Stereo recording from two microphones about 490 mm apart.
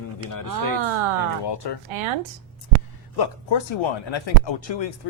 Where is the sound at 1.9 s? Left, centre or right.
Right.